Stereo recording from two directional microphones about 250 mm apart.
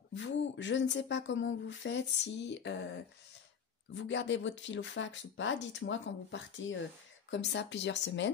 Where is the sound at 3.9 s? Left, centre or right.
Left.